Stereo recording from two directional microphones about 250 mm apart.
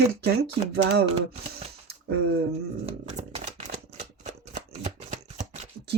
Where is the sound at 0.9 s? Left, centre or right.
Right.